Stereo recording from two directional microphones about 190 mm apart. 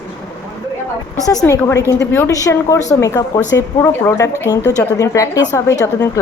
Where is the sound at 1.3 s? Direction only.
20° left (ahead or behind).